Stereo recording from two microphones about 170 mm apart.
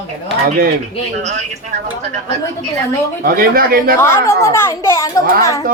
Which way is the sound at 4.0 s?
15° left (ahead or behind).